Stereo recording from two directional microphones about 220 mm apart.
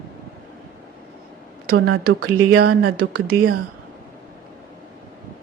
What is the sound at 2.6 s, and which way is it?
Speech, 45° right (ahead or behind).